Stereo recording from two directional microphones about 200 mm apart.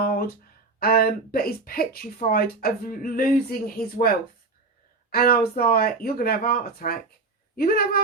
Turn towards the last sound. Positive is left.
turn(degrees=50)  # may be behind; listen again after turning